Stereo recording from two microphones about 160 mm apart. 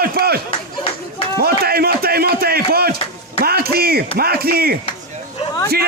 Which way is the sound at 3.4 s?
75° right (ahead or behind).